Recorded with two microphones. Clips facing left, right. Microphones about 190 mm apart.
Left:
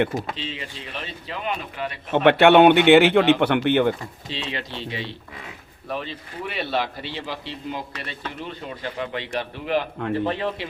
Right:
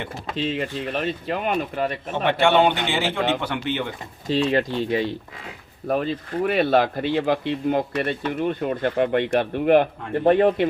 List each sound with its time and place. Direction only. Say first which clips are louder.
0.3 s speech: right 9 dB; 50° right (ahead or behind)
2.1 s speech: left 5 dB; 65° left (ahead or behind)
4.3 s speech: right 12 dB; 45° right (ahead or behind)